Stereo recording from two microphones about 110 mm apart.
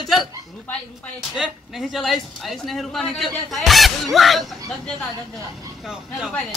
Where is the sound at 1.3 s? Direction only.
5° right (ahead or behind).